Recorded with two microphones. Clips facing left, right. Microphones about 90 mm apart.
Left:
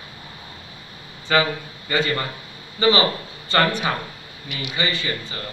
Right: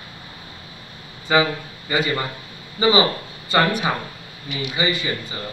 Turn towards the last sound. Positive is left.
turn(degrees=-15)  # may be behind; listen again after turning